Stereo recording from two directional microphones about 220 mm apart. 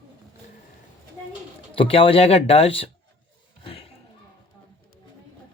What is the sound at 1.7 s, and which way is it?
Speech, 25° left (ahead or behind).